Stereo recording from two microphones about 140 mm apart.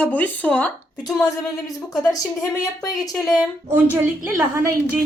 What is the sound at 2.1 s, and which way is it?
Speech, 25° left (ahead or behind).